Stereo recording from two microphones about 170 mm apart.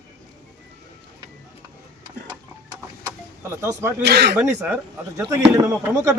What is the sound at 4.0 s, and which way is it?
Speech, 75° right (ahead or behind).